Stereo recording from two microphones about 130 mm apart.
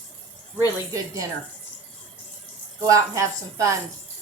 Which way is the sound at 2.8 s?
25° right (ahead or behind).